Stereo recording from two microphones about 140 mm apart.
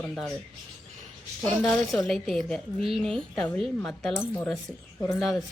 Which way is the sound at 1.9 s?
Centre (ahead or behind).